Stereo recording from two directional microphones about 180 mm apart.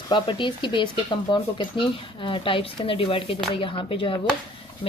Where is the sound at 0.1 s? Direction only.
25° left (ahead or behind).